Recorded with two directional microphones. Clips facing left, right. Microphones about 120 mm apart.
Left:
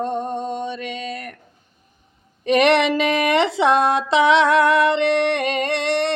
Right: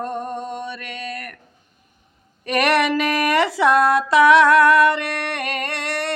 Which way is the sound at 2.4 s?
25° left (ahead or behind).